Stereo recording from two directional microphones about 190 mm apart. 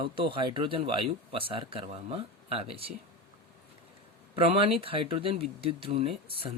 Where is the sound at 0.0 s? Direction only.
25° right (ahead or behind).